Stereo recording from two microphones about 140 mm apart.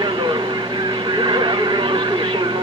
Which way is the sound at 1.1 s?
30° right (ahead or behind).